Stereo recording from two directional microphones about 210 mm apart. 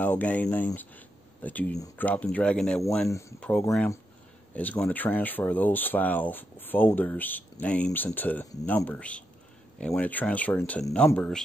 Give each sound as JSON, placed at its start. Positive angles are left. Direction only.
{"t": 0.0, "sound": "speech", "side_deg": 5}
{"t": 3.1, "sound": "speech", "side_deg": 15}